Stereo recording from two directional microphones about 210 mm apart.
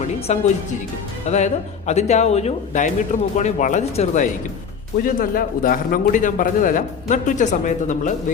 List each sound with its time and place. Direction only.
0.3 s a man's voice: 30° left (ahead or behind)